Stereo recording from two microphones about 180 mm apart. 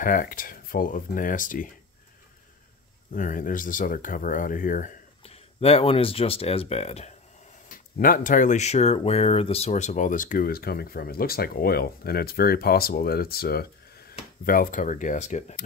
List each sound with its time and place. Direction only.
0.0 s speech: 50° left (ahead or behind)
3.1 s speech: 50° left (ahead or behind)
5.2 s speech: 35° left (ahead or behind)
7.7 s speech: 50° left (ahead or behind)